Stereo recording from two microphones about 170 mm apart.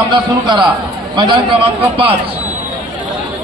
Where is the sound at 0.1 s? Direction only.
25° right (ahead or behind).